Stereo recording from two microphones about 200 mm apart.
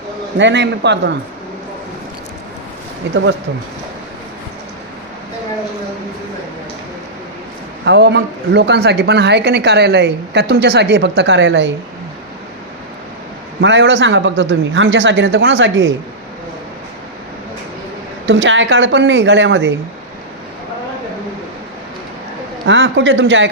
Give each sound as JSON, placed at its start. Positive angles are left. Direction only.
{"t": 0.3, "sound": "a woman's voice", "side_deg": -60}
{"t": 3.1, "sound": "a woman's voice", "side_deg": -60}
{"t": 7.9, "sound": "a woman's voice", "side_deg": -55}
{"t": 13.6, "sound": "a woman's voice", "side_deg": -65}
{"t": 18.3, "sound": "a woman's voice", "side_deg": -65}
{"t": 22.6, "sound": "a man's voice", "side_deg": -70}